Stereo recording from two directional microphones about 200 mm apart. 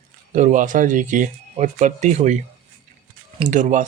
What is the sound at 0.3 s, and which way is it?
Speech, 40° right (ahead or behind).